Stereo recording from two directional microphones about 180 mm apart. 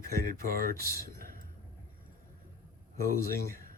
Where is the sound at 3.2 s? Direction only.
55° right (ahead or behind).